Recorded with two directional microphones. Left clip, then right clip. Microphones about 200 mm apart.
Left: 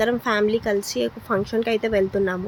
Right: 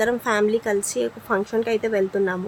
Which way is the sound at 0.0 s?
5° left (ahead or behind).